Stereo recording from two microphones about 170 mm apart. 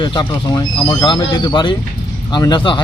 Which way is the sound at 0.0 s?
25° left (ahead or behind).